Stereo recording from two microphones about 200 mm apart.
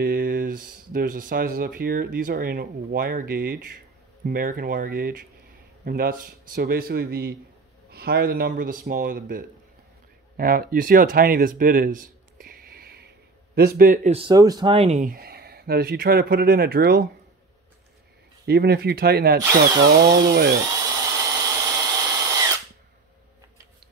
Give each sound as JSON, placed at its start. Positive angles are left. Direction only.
{"t": 0.0, "sound": "speech", "side_deg": -50}
{"t": 14.1, "sound": "speech", "side_deg": -20}
{"t": 18.4, "sound": "speech", "side_deg": -55}
{"t": 20.7, "sound": "tools", "side_deg": -20}